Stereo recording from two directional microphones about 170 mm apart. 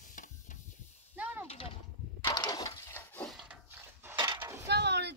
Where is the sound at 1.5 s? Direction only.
35° left (ahead or behind).